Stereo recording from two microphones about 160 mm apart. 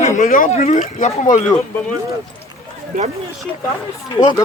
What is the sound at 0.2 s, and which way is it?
Speech, 55° left (ahead or behind).